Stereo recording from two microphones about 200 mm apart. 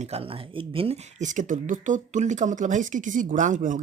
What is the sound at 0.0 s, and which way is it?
Speech, 30° right (ahead or behind).